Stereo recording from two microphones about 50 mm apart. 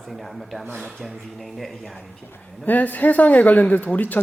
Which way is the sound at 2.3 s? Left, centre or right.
Left.